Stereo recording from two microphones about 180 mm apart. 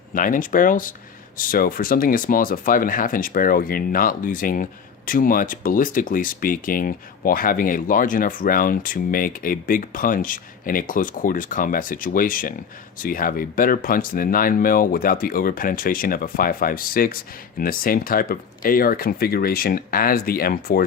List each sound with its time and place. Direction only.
0.1 s speech: 50° left (ahead or behind)